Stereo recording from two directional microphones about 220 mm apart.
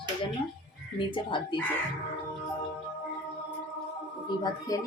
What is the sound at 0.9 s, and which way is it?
Speech, 20° left (ahead or behind).